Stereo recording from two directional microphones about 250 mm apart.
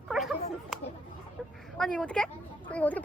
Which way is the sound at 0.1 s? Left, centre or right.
Centre.